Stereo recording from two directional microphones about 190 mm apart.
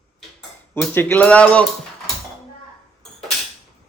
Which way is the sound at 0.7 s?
10° left (ahead or behind).